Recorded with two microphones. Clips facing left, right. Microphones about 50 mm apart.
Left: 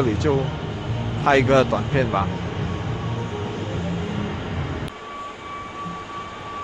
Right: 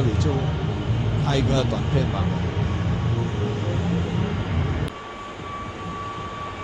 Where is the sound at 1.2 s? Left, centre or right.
Left.